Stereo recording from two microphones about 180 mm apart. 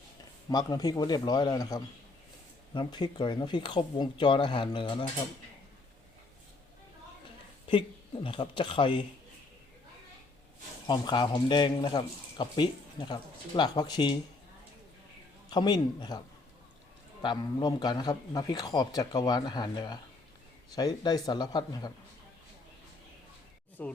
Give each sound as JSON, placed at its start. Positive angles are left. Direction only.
{"t": 0.5, "sound": "speech", "side_deg": 20}
{"t": 7.7, "sound": "speech", "side_deg": 30}
{"t": 10.8, "sound": "speech", "side_deg": 25}
{"t": 15.4, "sound": "speech", "side_deg": 25}
{"t": 17.2, "sound": "speech", "side_deg": 25}
{"t": 23.8, "sound": "speech", "side_deg": 10}